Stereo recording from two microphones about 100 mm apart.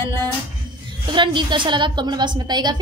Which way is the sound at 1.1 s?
50° right (ahead or behind).